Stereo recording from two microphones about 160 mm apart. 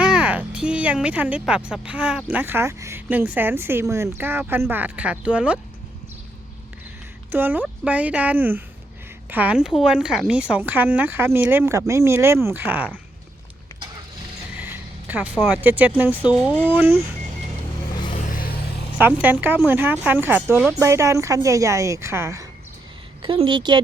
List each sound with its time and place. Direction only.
0.0 s speech: 10° right (ahead or behind)
7.3 s speech: 15° right (ahead or behind)
14.6 s a sound: 10° right (ahead or behind)
15.4 s speech: 10° right (ahead or behind)
18.3 s a sound: 65° left (ahead or behind)
18.9 s a woman's voice: 10° right (ahead or behind)
23.2 s a woman's voice: 30° right (ahead or behind)